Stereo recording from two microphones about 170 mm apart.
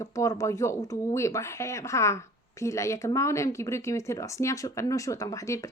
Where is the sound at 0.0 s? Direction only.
20° left (ahead or behind).